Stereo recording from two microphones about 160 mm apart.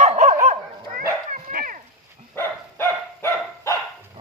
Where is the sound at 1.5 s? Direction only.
60° right (ahead or behind).